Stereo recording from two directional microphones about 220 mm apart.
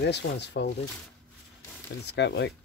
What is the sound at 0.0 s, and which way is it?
Speech, 50° left (ahead or behind).